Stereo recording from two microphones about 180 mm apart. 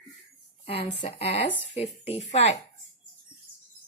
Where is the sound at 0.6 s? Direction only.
35° left (ahead or behind).